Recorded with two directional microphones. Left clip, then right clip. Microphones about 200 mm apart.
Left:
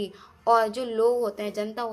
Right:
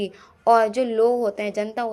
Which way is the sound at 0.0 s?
30° right (ahead or behind).